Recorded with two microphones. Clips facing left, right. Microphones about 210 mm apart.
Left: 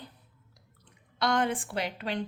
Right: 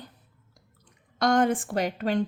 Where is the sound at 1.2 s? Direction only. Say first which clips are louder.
Right 5 dB; 45° right (ahead or behind).